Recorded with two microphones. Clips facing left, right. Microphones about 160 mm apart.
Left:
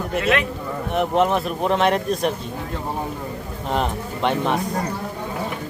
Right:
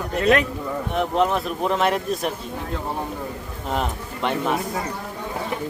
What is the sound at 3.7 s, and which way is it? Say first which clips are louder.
Speech: left 2 dB; centre (ahead or behind).